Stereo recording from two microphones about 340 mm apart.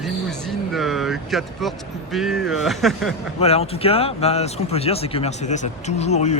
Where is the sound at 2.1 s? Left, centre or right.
Centre.